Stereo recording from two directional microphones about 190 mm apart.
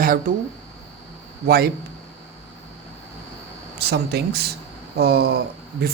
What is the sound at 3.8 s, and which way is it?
Speech, 60° right (ahead or behind).